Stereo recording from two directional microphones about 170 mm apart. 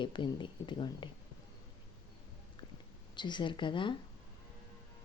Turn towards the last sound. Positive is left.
turn(degrees=30)  # may be behind; listen again after turning